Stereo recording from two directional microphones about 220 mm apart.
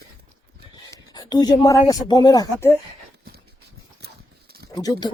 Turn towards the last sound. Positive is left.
turn(degrees=20)  # may be behind; listen again after turning